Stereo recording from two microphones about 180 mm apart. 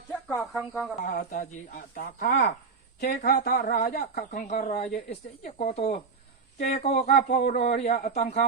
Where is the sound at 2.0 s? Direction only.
55° left (ahead or behind).